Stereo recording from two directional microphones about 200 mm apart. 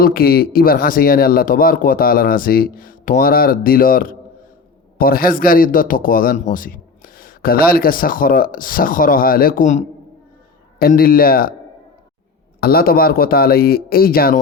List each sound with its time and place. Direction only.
0.0 s speech: 50° left (ahead or behind)
12.5 s speech: 50° left (ahead or behind)